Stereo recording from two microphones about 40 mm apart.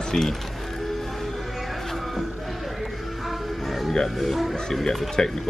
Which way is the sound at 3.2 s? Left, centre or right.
Centre.